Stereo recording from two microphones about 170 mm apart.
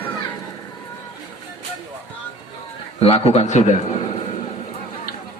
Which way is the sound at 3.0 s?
35° left (ahead or behind).